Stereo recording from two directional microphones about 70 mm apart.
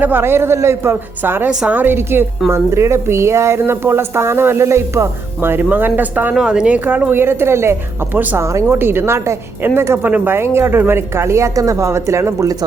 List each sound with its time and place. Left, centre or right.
0.0 s speech: right
1.2 s speech: right
6.3 s speech: centre
6.7 s speech: right